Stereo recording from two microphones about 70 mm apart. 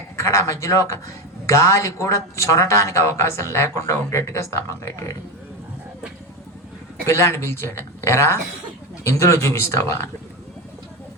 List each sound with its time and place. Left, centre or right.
0.2 s speech: left
7.1 s speech: left